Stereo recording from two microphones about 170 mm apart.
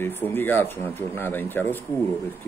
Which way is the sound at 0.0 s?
10° left (ahead or behind).